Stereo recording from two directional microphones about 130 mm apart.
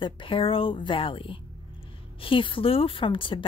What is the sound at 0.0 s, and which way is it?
A woman's voice, 40° left (ahead or behind).